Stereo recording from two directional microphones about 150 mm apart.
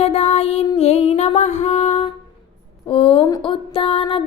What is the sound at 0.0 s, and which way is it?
Music, 45° left (ahead or behind).